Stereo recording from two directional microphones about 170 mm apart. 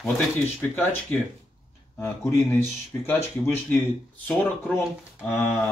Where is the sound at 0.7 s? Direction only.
10° left (ahead or behind).